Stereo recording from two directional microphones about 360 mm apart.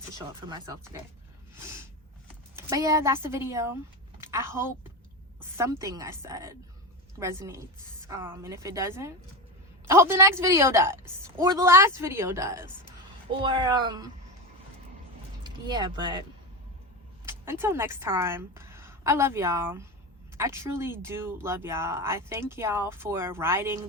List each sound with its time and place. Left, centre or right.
0.4 s speech: centre
2.6 s speech: centre
4.2 s a sound: centre
5.4 s speech: centre
15.4 s speech: centre
17.2 s speech: centre